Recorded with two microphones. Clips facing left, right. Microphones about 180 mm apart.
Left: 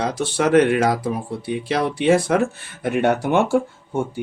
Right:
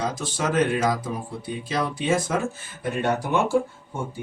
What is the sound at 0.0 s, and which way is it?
Speech, 70° left (ahead or behind).